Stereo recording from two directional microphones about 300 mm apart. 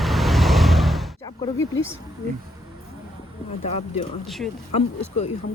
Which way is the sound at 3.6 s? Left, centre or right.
Left.